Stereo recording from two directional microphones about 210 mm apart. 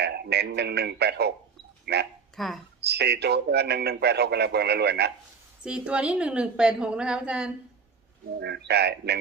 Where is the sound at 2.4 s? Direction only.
Centre (ahead or behind).